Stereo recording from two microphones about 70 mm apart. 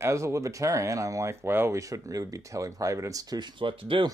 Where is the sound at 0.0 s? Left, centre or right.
Right.